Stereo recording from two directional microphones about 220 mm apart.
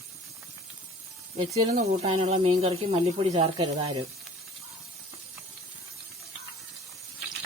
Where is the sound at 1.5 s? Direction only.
30° right (ahead or behind).